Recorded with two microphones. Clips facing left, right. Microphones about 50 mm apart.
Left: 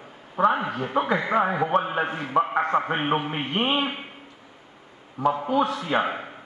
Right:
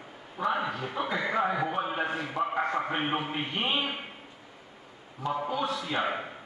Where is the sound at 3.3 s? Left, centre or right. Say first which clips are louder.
Left 5 dB; left.